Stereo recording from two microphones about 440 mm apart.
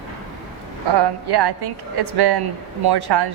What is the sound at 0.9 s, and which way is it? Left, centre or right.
Speech, right.